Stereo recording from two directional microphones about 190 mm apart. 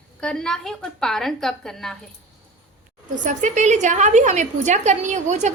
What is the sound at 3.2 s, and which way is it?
A woman's voice, 40° right (ahead or behind).